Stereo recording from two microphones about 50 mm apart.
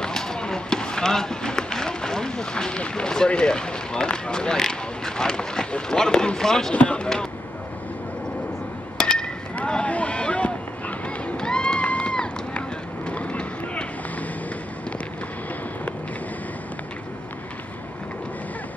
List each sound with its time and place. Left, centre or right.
0.0 s speech: centre
6.7 s speech: left
8.9 s a sound: centre
9.7 s speech: left
11.2 s run: centre